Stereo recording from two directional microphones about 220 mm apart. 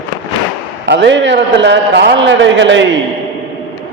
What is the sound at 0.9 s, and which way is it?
Speech, 55° right (ahead or behind).